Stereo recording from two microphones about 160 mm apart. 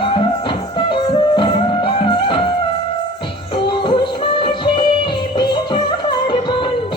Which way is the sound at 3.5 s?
30° left (ahead or behind).